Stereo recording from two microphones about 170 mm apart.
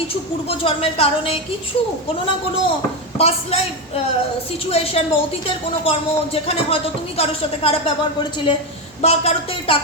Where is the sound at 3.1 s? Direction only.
35° left (ahead or behind).